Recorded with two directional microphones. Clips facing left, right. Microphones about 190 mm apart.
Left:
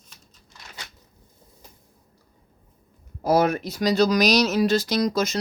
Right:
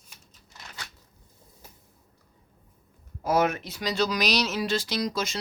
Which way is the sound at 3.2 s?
35° left (ahead or behind).